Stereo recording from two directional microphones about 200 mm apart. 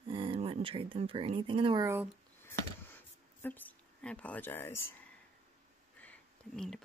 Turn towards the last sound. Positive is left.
turn(degrees=5)  # may be behind; listen again after turning